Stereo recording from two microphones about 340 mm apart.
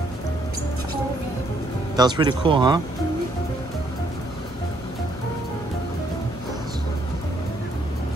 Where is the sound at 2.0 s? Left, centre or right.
Centre.